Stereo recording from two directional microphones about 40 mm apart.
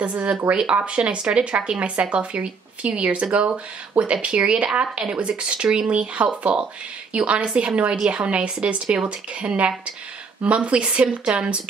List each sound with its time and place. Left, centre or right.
0.0 s speech: right
5.0 s speech: right